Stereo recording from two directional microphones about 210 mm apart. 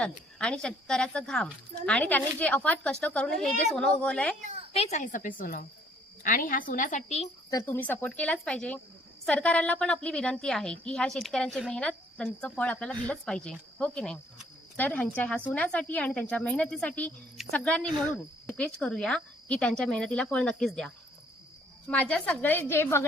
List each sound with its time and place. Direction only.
0.0 s a woman's voice: 5° left (ahead or behind)
4.4 s a sound: 30° right (ahead or behind)
4.7 s a woman's voice: 30° left (ahead or behind)
7.5 s a woman's voice: 10° left (ahead or behind)